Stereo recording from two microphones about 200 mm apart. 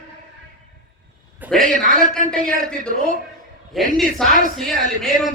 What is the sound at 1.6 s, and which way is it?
Speech, 40° right (ahead or behind).